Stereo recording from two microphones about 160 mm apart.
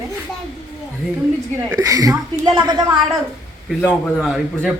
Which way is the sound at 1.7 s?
20° right (ahead or behind).